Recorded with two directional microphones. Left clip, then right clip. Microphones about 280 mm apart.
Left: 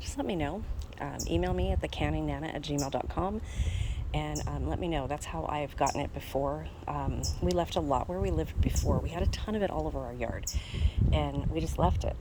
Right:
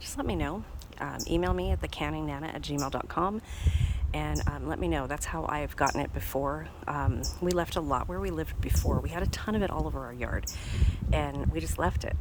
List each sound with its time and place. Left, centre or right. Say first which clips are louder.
0.2 s speech: even; centre
9.7 s speech: left 1 dB; right
10.8 s speech: right 1 dB; centre